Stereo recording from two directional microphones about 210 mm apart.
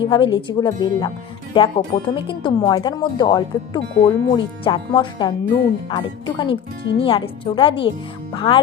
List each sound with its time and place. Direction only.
0.0 s speech: 25° left (ahead or behind)